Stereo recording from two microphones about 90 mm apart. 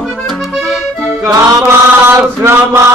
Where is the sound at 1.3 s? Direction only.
30° right (ahead or behind).